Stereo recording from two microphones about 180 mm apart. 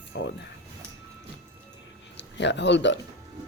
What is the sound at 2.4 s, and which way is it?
Speech, 75° left (ahead or behind).